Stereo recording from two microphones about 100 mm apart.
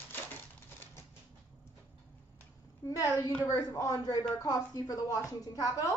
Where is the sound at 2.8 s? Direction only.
30° left (ahead or behind).